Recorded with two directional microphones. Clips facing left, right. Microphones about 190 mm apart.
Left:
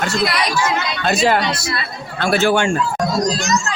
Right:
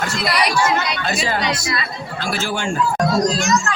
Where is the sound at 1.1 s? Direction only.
70° left (ahead or behind).